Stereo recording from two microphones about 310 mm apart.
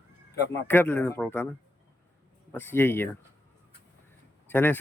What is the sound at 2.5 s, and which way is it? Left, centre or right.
Speech, centre.